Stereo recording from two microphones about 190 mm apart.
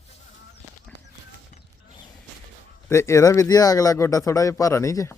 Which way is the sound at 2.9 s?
15° left (ahead or behind).